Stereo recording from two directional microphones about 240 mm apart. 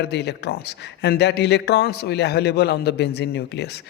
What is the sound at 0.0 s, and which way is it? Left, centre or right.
A man's voice, left.